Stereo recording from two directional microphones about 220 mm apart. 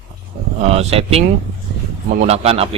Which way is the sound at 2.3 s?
25° right (ahead or behind).